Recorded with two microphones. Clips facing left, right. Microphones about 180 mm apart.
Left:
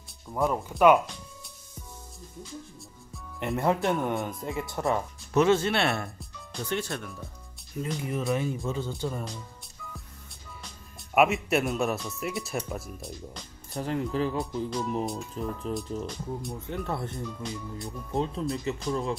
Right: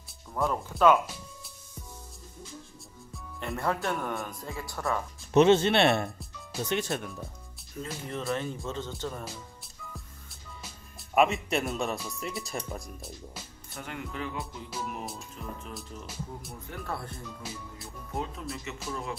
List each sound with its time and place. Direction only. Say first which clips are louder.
0.5 s speech: left 2 dB; 15° left (ahead or behind)
3.3 s speech: left 5 dB; 20° left (ahead or behind)
5.3 s speech: right 2 dB; 25° right (ahead or behind)
7.8 s speech: left 5 dB; 10° left (ahead or behind)
11.1 s speech: left 2 dB; 5° left (ahead or behind)
13.7 s speech: left 9 dB; 35° left (ahead or behind)
14.4 s speech: left 8 dB; 5° right (ahead or behind)
15.4 s speech: left 9 dB; 35° left (ahead or behind)
15.7 s speech: left 10 dB; centre (ahead or behind)
16.6 s speech: left 3 dB; 25° left (ahead or behind)
17.3 s speech: left 6 dB; 5° right (ahead or behind)
18.1 s speech: left 7 dB; 30° left (ahead or behind)